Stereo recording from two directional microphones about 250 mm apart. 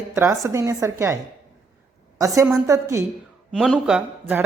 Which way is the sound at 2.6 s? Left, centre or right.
Centre.